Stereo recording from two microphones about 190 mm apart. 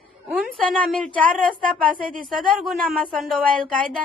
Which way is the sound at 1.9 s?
45° right (ahead or behind).